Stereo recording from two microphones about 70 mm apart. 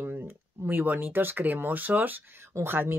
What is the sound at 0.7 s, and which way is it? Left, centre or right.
Speech, right.